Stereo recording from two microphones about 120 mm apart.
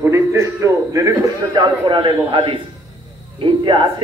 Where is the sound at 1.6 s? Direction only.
40° right (ahead or behind).